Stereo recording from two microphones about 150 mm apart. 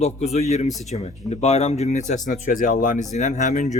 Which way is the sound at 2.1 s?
60° left (ahead or behind).